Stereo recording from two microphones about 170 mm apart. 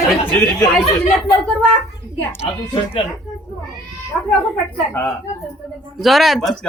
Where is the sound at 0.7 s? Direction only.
5° left (ahead or behind).